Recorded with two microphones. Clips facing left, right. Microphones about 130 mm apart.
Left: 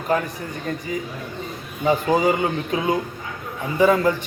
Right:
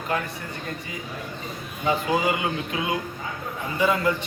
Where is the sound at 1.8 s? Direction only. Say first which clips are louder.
Left 5 dB; 30° left (ahead or behind).